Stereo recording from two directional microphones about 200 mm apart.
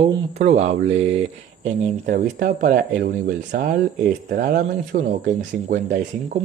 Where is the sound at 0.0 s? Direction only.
30° right (ahead or behind).